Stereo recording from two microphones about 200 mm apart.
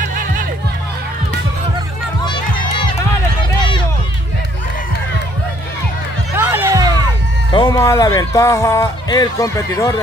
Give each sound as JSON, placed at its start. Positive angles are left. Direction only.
{"t": 0.1, "sound": "music", "side_deg": -45}
{"t": 6.3, "sound": "music", "side_deg": -10}
{"t": 7.5, "sound": "speech", "side_deg": 20}